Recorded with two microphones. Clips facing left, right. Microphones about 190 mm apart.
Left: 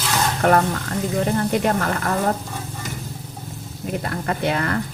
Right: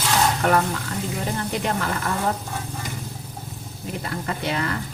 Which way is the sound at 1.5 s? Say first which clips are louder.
Left 5 dB; 50° left (ahead or behind).